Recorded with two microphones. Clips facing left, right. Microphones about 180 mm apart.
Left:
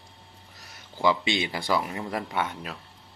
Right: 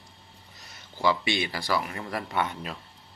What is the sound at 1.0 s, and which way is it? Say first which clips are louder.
Speech: left 1 dB; 20° left (ahead or behind).